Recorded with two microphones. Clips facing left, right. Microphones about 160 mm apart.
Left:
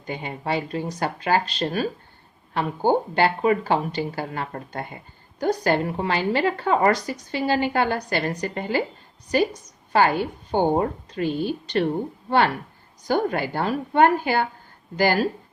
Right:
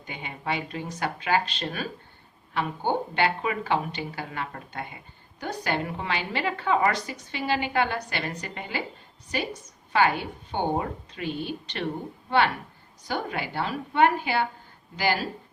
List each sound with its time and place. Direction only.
0.0 s a woman's voice: 40° left (ahead or behind)
9.9 s a woman's voice: 40° left (ahead or behind)
13.1 s a woman's voice: 45° left (ahead or behind)